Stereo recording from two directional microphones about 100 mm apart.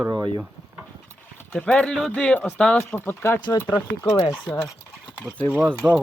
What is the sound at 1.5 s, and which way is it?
Speech, 10° left (ahead or behind).